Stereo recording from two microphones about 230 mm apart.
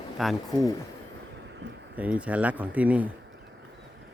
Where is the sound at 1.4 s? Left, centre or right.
Right.